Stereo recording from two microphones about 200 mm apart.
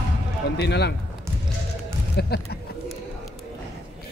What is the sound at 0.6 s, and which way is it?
Speech, 55° left (ahead or behind).